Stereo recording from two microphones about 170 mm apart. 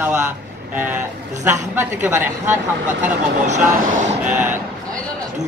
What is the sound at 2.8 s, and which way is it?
Speech, 45° right (ahead or behind).